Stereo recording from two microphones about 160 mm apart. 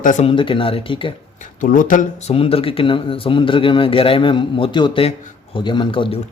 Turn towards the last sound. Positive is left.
turn(degrees=30)  # may be behind; listen again after turning